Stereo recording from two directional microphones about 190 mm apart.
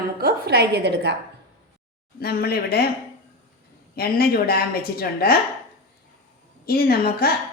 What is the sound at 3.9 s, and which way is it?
A woman's voice, 50° left (ahead or behind).